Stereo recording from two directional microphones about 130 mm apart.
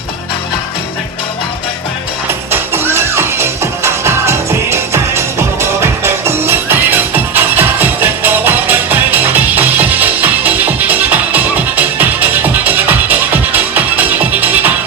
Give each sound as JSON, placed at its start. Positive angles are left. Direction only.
{"t": 2.5, "sound": "music", "side_deg": -20}